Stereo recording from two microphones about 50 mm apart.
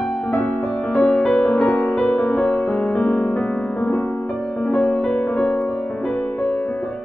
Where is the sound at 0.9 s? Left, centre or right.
Centre.